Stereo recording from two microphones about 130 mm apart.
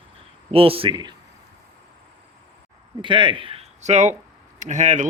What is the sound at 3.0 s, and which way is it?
Speech, 40° right (ahead or behind).